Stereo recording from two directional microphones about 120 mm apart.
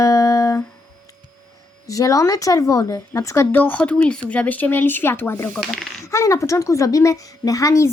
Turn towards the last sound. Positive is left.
turn(degrees=25)  # may be behind; listen again after turning